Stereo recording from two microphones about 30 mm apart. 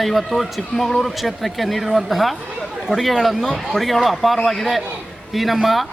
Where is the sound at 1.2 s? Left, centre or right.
Centre.